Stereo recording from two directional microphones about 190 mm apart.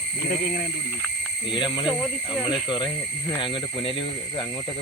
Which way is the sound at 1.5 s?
25° left (ahead or behind).